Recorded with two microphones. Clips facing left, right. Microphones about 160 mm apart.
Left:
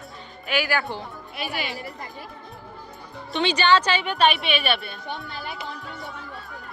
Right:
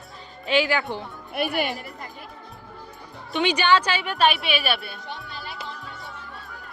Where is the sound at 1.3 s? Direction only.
55° right (ahead or behind).